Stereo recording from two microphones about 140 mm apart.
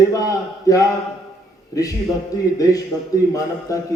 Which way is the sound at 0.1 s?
25° left (ahead or behind).